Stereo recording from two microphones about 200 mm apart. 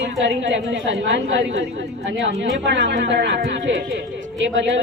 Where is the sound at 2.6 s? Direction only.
65° right (ahead or behind).